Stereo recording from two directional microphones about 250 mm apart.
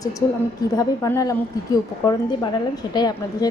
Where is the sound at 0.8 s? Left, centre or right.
Centre.